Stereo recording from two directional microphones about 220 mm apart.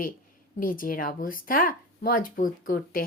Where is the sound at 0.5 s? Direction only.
40° left (ahead or behind).